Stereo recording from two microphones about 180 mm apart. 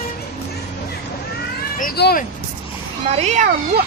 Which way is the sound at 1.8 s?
60° left (ahead or behind).